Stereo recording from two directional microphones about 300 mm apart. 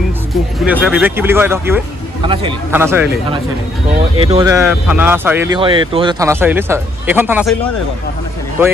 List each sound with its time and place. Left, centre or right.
0.3 s speech: centre